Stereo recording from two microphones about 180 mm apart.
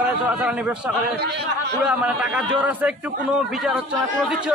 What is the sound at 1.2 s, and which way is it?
Speech, 70° right (ahead or behind).